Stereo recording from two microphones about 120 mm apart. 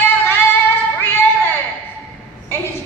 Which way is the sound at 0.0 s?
20° left (ahead or behind).